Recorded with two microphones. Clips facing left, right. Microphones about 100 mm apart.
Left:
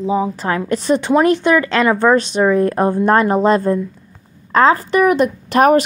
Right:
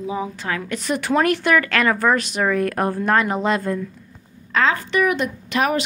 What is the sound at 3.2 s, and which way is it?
A woman's voice, 40° left (ahead or behind).